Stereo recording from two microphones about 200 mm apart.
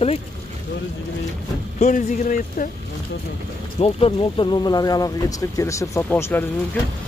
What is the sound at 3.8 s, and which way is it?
Speech, 30° left (ahead or behind).